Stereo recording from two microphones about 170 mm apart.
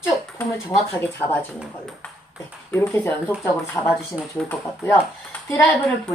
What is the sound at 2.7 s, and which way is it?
Speech, 15° left (ahead or behind).